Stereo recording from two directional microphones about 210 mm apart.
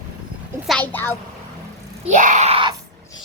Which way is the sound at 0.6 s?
5° left (ahead or behind).